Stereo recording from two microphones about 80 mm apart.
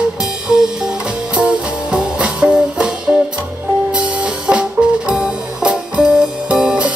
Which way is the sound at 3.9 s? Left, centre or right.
Centre.